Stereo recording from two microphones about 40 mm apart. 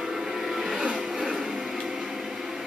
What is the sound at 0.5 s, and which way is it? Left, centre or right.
Music, centre.